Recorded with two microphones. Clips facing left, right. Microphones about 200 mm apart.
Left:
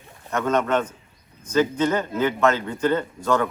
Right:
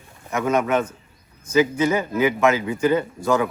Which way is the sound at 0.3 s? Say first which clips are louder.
Right 1 dB; 10° right (ahead or behind).